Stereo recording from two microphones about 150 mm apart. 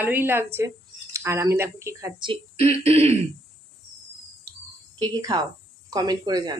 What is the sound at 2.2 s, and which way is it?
Speech, 40° right (ahead or behind).